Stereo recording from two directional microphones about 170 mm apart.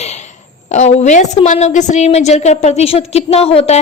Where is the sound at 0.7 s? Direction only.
45° left (ahead or behind).